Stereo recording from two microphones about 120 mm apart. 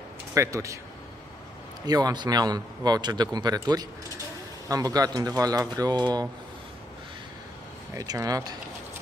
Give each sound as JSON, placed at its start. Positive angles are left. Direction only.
{"t": 0.3, "sound": "speech", "side_deg": -25}
{"t": 1.9, "sound": "speech", "side_deg": -30}
{"t": 7.9, "sound": "speech", "side_deg": -30}